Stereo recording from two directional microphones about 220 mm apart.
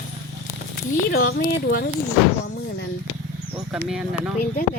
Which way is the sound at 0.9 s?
40° left (ahead or behind).